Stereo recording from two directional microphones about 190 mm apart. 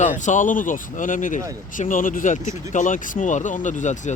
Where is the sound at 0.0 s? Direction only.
40° left (ahead or behind).